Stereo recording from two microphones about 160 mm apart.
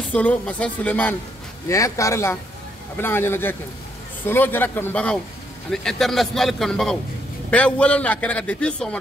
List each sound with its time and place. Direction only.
0.1 s a man's voice: 10° left (ahead or behind)